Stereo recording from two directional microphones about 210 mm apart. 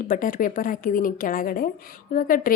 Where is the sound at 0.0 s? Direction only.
40° left (ahead or behind).